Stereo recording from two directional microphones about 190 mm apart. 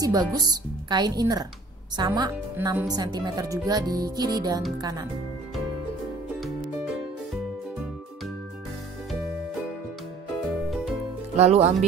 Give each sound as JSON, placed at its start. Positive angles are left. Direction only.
{"t": 0.0, "sound": "speech", "side_deg": -20}
{"t": 11.3, "sound": "speech", "side_deg": -35}